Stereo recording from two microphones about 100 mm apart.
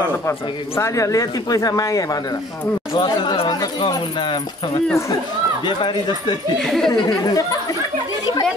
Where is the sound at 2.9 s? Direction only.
45° left (ahead or behind).